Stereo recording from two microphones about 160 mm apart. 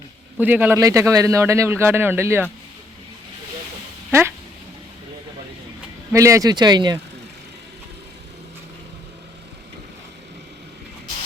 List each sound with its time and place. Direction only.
0.3 s a man's voice: 10° right (ahead or behind)
4.1 s a man's voice: 15° right (ahead or behind)
6.1 s speech: 20° right (ahead or behind)